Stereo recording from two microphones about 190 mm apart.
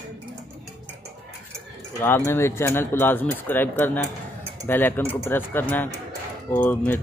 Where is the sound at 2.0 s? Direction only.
10° left (ahead or behind).